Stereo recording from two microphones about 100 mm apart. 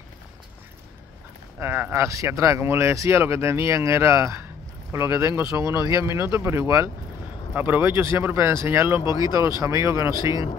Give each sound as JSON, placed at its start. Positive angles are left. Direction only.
{"t": 1.6, "sound": "speech", "side_deg": -25}